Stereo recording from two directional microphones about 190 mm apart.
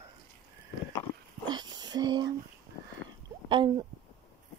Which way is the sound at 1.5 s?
20° right (ahead or behind).